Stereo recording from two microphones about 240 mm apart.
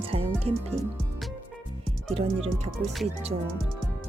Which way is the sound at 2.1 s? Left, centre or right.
Right.